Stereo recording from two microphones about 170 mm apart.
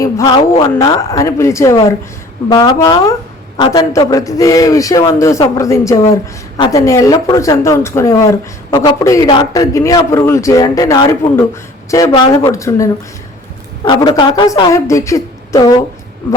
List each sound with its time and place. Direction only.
0.0 s speech: 20° left (ahead or behind)
13.8 s speech: 30° left (ahead or behind)